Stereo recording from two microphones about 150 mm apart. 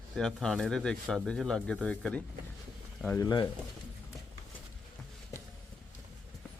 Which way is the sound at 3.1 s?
25° left (ahead or behind).